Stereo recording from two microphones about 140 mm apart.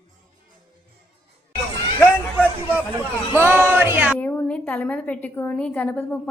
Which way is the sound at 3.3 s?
15° right (ahead or behind).